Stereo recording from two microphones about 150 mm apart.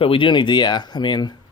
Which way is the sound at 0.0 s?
35° left (ahead or behind).